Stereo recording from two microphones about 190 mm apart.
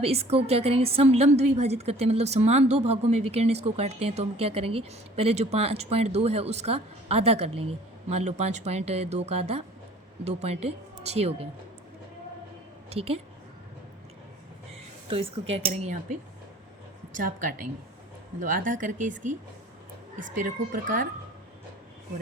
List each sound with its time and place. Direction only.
0.0 s a woman's voice: 30° right (ahead or behind)
12.9 s a woman's voice: 30° right (ahead or behind)
15.1 s a woman's voice: 30° right (ahead or behind)
17.2 s speech: 45° right (ahead or behind)
20.1 s speech: 45° right (ahead or behind)